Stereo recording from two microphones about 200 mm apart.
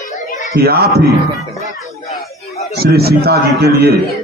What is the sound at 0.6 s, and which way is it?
Speech, 50° right (ahead or behind).